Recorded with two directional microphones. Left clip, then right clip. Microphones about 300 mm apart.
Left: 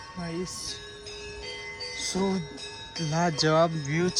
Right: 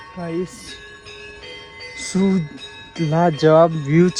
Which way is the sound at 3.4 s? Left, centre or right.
Centre.